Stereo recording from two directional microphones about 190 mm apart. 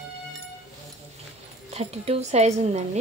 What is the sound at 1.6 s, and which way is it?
A woman's voice, 35° right (ahead or behind).